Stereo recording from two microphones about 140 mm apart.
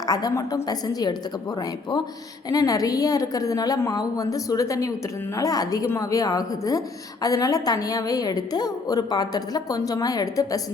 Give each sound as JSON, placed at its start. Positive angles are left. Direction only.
{"t": 0.0, "sound": "speech", "side_deg": 25}